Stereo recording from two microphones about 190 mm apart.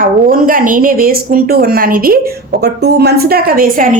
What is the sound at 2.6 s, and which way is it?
A woman's voice, 60° right (ahead or behind).